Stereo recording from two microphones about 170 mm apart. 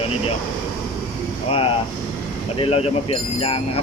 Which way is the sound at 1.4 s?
35° left (ahead or behind).